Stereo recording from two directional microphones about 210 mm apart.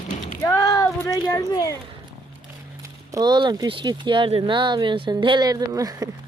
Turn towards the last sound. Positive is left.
turn(degrees=-15)  # may be behind; listen again after turning